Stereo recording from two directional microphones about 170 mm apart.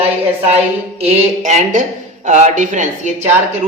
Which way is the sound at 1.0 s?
40° right (ahead or behind).